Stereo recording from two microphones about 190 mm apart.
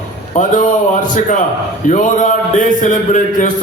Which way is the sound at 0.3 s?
40° left (ahead or behind).